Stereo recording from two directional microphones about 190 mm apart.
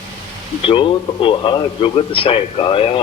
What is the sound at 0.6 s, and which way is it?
Speech, 25° left (ahead or behind).